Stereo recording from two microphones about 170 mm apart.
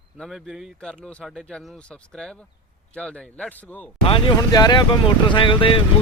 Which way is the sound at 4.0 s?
30° left (ahead or behind).